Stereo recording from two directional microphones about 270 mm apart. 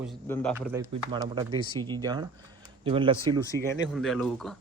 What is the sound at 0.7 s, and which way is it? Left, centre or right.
Speech, centre.